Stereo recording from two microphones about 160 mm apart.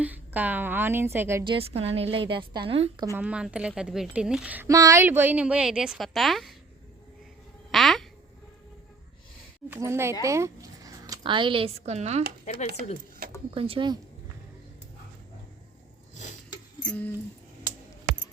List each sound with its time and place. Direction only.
0.0 s a woman's voice: 10° right (ahead or behind)
1.5 s a woman's voice: 35° right (ahead or behind)
3.2 s a woman's voice: 10° right (ahead or behind)
4.7 s a woman's voice: 20° right (ahead or behind); by 6.5 s centre (ahead or behind)
7.7 s a sound: centre (ahead or behind)
9.6 s a woman's voice: 15° right (ahead or behind); by 12.2 s 45° right (ahead or behind)
12.5 s speech: 45° left (ahead or behind)
13.5 s a woman's voice: 35° right (ahead or behind)
16.8 s a sound: 5° left (ahead or behind)